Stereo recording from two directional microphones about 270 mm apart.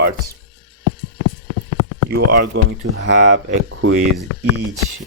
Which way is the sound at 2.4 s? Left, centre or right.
Right.